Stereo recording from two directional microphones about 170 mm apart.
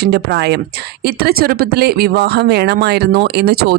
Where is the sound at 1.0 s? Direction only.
65° right (ahead or behind).